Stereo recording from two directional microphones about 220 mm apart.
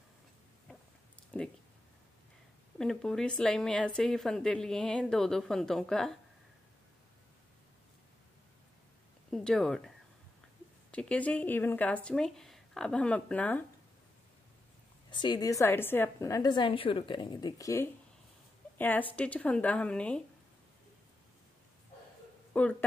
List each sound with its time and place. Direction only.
1.3 s speech: 5° left (ahead or behind)
2.8 s speech: centre (ahead or behind)
9.3 s speech: centre (ahead or behind)
15.0 s a woman's voice: 20° left (ahead or behind); by 20.2 s 5° left (ahead or behind)
22.5 s speech: 5° left (ahead or behind)